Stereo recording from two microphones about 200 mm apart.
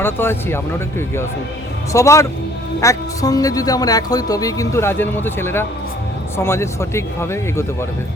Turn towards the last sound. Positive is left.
turn(degrees=15)  # may be behind; listen again after turning